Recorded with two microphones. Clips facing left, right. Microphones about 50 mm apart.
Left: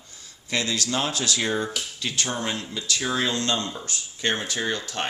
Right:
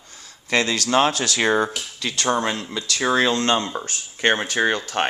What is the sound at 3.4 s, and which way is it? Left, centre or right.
Speech, right.